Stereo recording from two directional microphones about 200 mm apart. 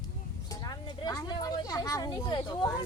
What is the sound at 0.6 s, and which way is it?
Speech, 20° left (ahead or behind).